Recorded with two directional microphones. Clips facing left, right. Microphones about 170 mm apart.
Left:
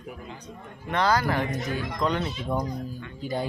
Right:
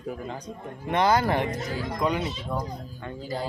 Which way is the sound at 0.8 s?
20° right (ahead or behind).